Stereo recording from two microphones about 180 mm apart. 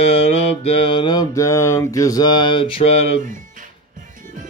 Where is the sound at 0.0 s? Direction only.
35° left (ahead or behind).